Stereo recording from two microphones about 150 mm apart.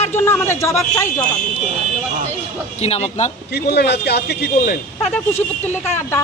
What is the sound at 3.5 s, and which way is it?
A man's voice, 90° left.